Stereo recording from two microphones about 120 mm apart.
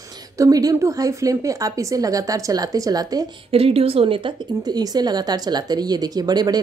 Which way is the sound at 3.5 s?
55° right (ahead or behind).